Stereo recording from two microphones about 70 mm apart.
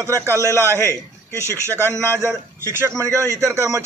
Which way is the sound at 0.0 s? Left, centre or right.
Right.